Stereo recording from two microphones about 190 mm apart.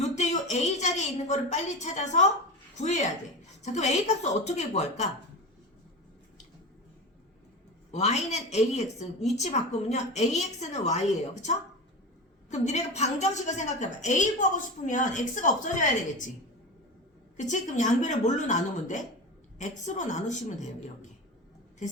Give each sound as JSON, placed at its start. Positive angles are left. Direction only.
{"t": 0.0, "sound": "a sound", "side_deg": 35}
{"t": 2.7, "sound": "a woman's voice", "side_deg": 40}
{"t": 7.9, "sound": "a woman's voice", "side_deg": 35}
{"t": 17.3, "sound": "a woman's voice", "side_deg": 40}